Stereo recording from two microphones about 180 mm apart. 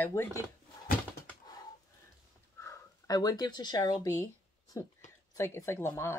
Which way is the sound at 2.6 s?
20° left (ahead or behind).